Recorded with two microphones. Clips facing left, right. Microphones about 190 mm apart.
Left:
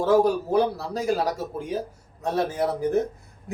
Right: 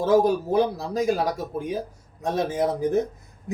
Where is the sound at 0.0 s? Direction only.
20° right (ahead or behind).